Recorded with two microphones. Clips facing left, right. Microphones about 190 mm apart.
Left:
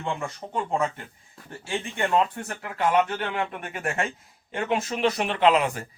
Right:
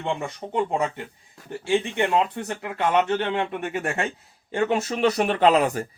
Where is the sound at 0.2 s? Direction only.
20° right (ahead or behind).